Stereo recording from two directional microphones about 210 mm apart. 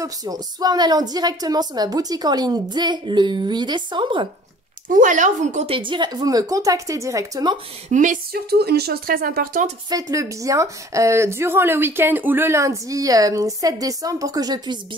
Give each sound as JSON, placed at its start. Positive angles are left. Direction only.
{"t": 0.0, "sound": "a woman's voice", "side_deg": -15}
{"t": 4.8, "sound": "a woman's voice", "side_deg": -40}
{"t": 7.9, "sound": "speech", "side_deg": -35}
{"t": 9.8, "sound": "a woman's voice", "side_deg": -15}